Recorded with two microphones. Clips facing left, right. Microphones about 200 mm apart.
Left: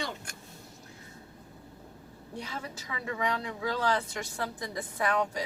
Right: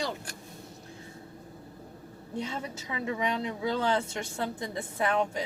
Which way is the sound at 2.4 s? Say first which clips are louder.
Right 4 dB; 25° right (ahead or behind).